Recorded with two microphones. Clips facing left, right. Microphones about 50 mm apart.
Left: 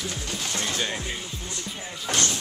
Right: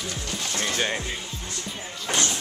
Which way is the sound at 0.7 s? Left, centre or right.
Right.